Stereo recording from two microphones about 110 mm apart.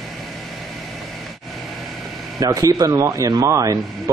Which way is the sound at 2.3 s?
30° right (ahead or behind).